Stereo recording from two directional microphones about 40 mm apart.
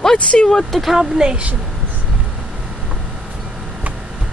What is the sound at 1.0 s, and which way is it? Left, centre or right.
Speech, centre.